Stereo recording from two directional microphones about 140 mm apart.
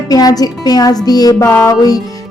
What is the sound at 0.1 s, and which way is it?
A woman's voice, 25° left (ahead or behind).